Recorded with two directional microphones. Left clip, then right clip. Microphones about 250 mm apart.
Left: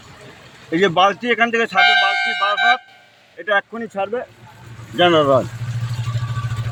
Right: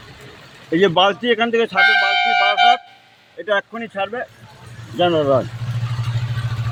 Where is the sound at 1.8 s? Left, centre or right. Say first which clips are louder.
Even; centre.